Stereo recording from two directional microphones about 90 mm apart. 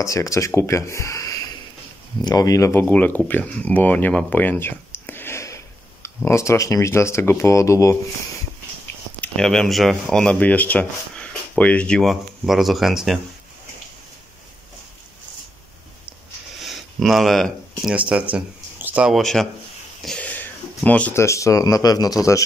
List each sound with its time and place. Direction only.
0.0 s speech: 35° left (ahead or behind)
2.8 s speech: 20° left (ahead or behind)
9.4 s speech: 5° left (ahead or behind)
12.0 s speech: centre (ahead or behind)
16.6 s a sound: centre (ahead or behind)
18.0 s speech: 15° right (ahead or behind)
19.0 s speech: centre (ahead or behind)
20.2 s a sound: 15° left (ahead or behind)
21.1 s speech: 30° left (ahead or behind)